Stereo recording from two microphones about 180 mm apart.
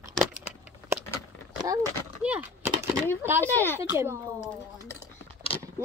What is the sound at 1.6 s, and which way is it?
Speech, 20° right (ahead or behind).